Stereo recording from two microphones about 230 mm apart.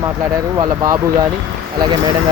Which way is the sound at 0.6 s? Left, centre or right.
Centre.